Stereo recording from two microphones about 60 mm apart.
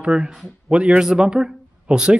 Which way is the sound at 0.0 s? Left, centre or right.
Centre.